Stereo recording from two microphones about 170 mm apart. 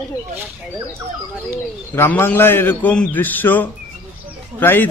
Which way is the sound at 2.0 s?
15° left (ahead or behind).